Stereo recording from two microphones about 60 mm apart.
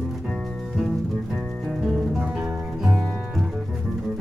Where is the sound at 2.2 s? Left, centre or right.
Centre.